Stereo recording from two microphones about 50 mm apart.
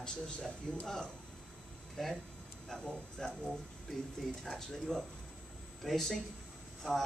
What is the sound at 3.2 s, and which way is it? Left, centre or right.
Speech, centre.